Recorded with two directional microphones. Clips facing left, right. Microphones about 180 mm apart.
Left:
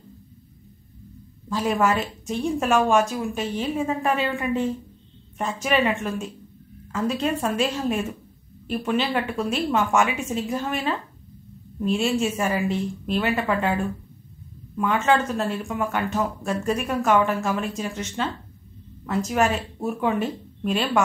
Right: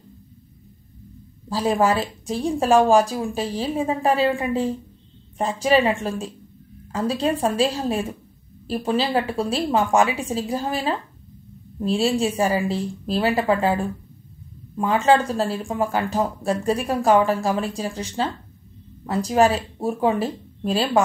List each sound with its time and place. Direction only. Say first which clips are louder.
1.5 s speech: right 2 dB; 35° right (ahead or behind)